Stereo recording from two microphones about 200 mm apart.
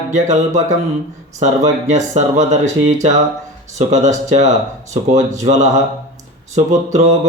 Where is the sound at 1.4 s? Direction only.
35° right (ahead or behind).